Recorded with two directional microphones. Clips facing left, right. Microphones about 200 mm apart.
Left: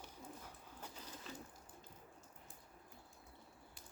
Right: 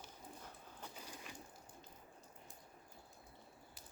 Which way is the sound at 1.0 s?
10° right (ahead or behind).